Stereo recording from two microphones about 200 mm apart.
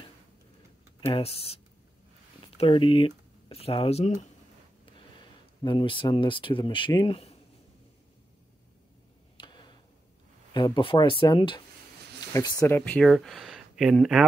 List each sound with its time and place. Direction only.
1.0 s speech: 30° left (ahead or behind)
5.6 s speech: 25° left (ahead or behind)
9.4 s tick-tock: 20° left (ahead or behind)
10.5 s speech: 25° left (ahead or behind); by 14.2 s centre (ahead or behind)